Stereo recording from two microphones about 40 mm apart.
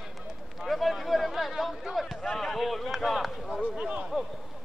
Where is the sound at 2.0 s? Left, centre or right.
Centre.